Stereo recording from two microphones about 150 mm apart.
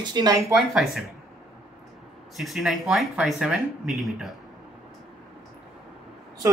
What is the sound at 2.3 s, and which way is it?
Speech, centre (ahead or behind).